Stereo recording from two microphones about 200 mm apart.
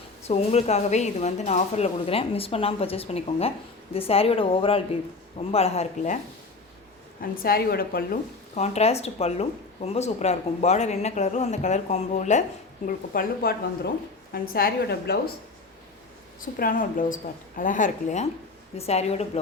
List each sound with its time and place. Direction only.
0.2 s speech: 30° left (ahead or behind)
7.2 s a woman's voice: 50° left (ahead or behind)
8.5 s a woman's voice: 35° left (ahead or behind); by 15.2 s 55° left (ahead or behind)
16.6 s a woman's voice: 45° left (ahead or behind)